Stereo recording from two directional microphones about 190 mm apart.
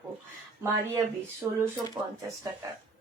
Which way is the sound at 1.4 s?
10° right (ahead or behind).